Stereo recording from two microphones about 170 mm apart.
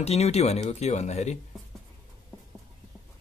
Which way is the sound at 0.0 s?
40° left (ahead or behind).